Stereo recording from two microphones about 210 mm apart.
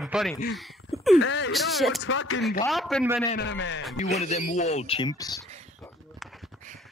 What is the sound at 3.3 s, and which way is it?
Speech, 55° left (ahead or behind).